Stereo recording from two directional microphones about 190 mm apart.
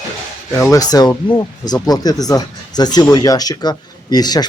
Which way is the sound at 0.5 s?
15° left (ahead or behind).